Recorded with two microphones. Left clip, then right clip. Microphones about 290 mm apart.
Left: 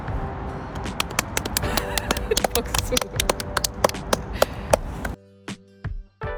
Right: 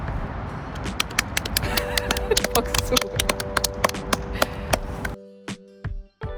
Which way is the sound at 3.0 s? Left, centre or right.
Centre.